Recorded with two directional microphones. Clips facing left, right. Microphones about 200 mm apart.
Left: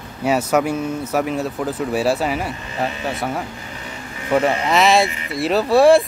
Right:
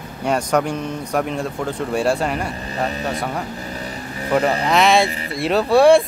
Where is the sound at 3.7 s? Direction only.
35° right (ahead or behind).